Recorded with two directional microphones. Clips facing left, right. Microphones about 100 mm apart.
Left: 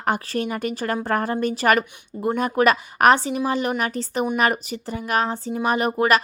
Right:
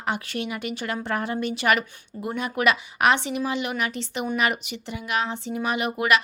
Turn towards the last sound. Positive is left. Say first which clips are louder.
# left 4 dB
turn(degrees=40)  # may be behind; listen again after turning